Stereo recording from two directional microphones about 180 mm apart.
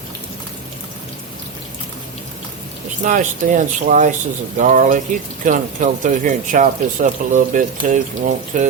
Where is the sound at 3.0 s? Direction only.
45° right (ahead or behind).